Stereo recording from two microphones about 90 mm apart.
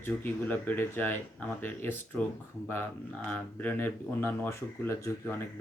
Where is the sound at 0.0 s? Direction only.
20° left (ahead or behind).